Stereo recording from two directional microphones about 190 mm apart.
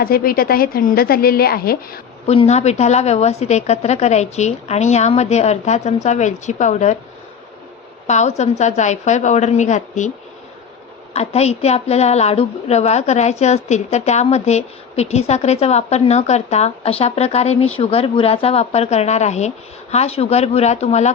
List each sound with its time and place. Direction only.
0.0 s a woman's voice: 50° left (ahead or behind)
2.2 s a woman's voice: 35° left (ahead or behind)
8.0 s a woman's voice: 35° left (ahead or behind)
11.1 s a woman's voice: 35° left (ahead or behind)